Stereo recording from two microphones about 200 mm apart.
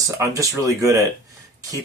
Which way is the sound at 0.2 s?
15° right (ahead or behind).